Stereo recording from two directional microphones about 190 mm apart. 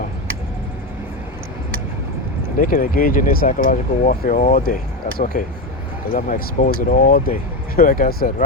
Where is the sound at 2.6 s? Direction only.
45° left (ahead or behind).